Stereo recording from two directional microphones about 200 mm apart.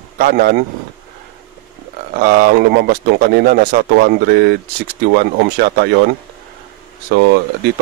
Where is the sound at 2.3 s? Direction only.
50° right (ahead or behind).